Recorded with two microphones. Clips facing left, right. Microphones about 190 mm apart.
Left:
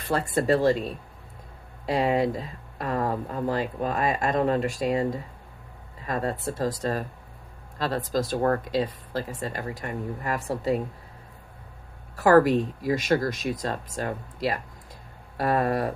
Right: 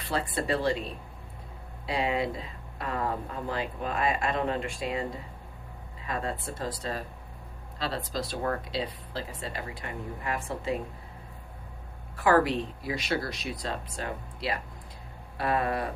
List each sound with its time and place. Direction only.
0.0 s speech: 45° left (ahead or behind)
1.9 s speech: 45° left (ahead or behind)
12.1 s speech: 45° left (ahead or behind)